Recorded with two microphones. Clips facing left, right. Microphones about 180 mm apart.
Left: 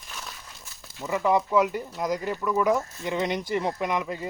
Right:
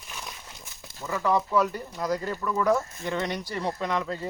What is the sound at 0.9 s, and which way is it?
Speech, 20° left (ahead or behind).